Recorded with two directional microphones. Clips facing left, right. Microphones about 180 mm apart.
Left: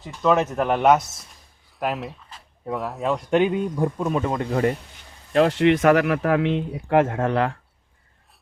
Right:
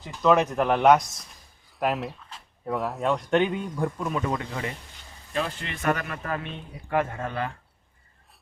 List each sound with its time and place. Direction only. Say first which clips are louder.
0.0 s speech: left 1 dB; centre (ahead or behind)
3.2 s speech: left 7 dB; 10° left (ahead or behind)
3.8 s speech: left 1 dB; 25° left (ahead or behind)
4.4 s speech: left 11 dB; 45° left (ahead or behind)
5.3 s speech: left 14 dB; 75° left (ahead or behind)